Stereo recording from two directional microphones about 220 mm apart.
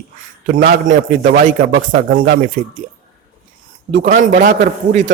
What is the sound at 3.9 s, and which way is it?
Speech, 35° right (ahead or behind).